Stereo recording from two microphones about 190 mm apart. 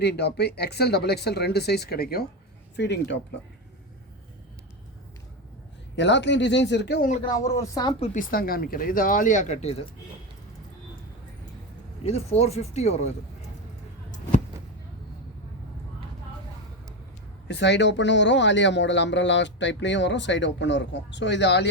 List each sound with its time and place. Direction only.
0.0 s speech: 60° left (ahead or behind)
2.7 s speech: 65° left (ahead or behind)
6.0 s speech: 70° left (ahead or behind)
7.4 s speech: 15° left (ahead or behind); by 8.2 s 30° left (ahead or behind)
8.3 s speech: 50° left (ahead or behind); by 9.7 s 35° left (ahead or behind)
12.0 s speech: 35° left (ahead or behind)
17.5 s speech: 65° left (ahead or behind)